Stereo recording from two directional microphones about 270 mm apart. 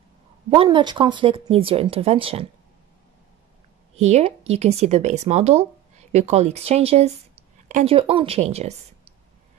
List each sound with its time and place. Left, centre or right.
0.5 s speech: centre
3.9 s speech: right